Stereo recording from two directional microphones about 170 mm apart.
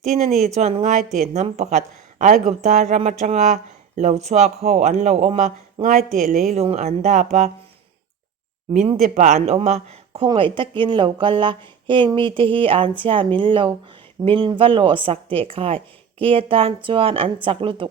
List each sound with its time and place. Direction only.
0.0 s speech: 40° right (ahead or behind)
8.9 s speech: 45° right (ahead or behind)